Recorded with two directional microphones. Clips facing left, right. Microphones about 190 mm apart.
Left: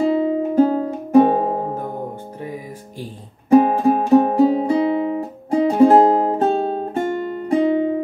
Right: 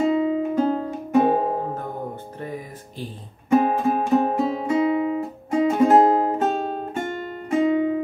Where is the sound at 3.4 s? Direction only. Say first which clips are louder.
Left 6 dB; 35° left (ahead or behind).